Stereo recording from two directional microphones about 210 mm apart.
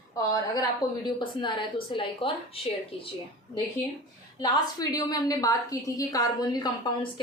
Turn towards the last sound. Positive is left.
turn(degrees=20)  # may be behind; listen again after turning